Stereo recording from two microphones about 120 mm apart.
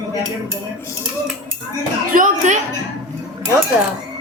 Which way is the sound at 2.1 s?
90° right.